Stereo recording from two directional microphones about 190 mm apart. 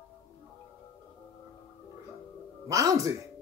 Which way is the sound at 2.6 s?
15° right (ahead or behind).